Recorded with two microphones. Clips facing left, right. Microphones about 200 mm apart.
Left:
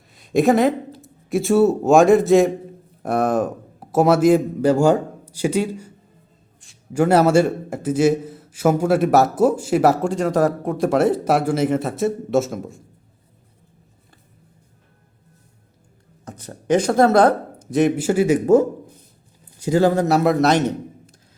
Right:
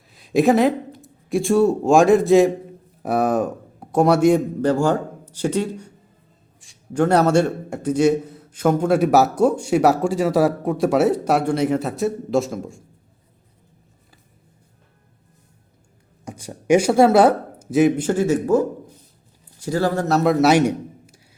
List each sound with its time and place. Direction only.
0.1 s a sound: centre (ahead or behind)
1.0 s a man's voice: centre (ahead or behind)
16.2 s speech: 10° right (ahead or behind); by 18.3 s 10° left (ahead or behind)
19.6 s speech: 20° left (ahead or behind)
20.2 s a man's voice: 5° right (ahead or behind)